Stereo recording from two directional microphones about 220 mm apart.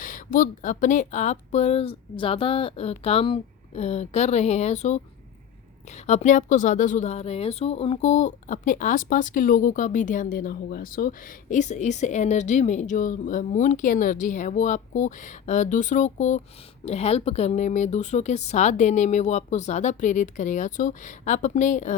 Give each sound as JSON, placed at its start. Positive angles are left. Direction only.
{"t": 0.0, "sound": "speech", "side_deg": 35}